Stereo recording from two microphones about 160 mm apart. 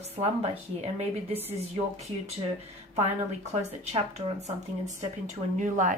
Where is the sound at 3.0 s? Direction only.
45° right (ahead or behind).